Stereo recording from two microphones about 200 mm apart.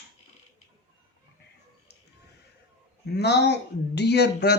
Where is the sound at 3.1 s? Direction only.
55° left (ahead or behind).